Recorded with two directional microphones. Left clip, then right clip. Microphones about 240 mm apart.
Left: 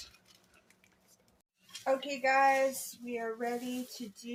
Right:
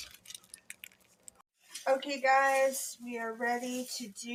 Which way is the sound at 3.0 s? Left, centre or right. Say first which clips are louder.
Left 5 dB; right.